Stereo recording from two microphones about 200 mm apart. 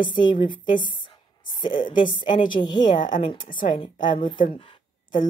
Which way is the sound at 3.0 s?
40° left (ahead or behind).